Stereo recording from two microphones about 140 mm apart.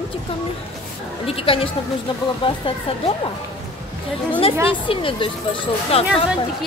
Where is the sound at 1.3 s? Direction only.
40° left (ahead or behind).